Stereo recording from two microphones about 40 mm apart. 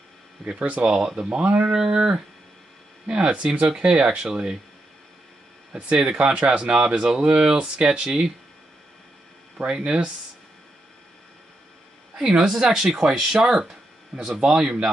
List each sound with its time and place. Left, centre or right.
0.4 s speech: centre
0.8 s speech: right
5.7 s speech: right
9.7 s speech: right
12.2 s speech: centre